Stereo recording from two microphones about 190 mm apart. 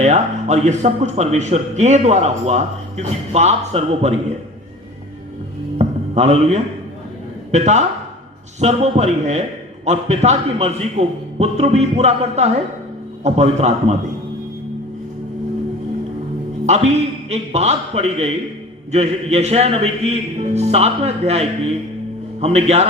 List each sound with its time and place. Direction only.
0.0 s a man's voice: 40° right (ahead or behind)
5.7 s a sound: 35° right (ahead or behind)
7.5 s a man's voice: 40° right (ahead or behind)
16.6 s a man's voice: 35° right (ahead or behind)